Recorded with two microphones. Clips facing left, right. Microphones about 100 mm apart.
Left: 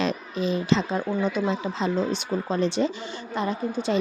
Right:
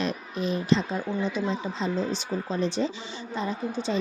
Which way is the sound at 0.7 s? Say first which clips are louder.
Even; 80° left.